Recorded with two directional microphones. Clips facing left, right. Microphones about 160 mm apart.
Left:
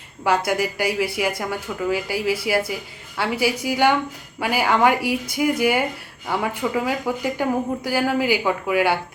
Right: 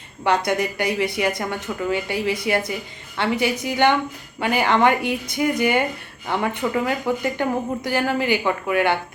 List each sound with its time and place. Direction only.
0.3 s speech: 5° left (ahead or behind)